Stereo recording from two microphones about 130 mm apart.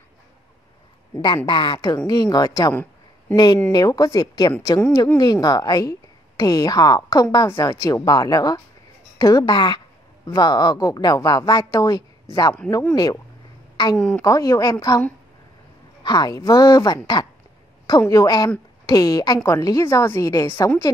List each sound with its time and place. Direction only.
1.2 s a woman's voice: 35° left (ahead or behind)
2.7 s a sound: 15° left (ahead or behind)
3.7 s a woman's voice: 30° left (ahead or behind)
13.9 s a woman's voice: 5° left (ahead or behind)
14.2 s a woman's voice: 25° left (ahead or behind)
16.0 s a woman's voice: 35° left (ahead or behind)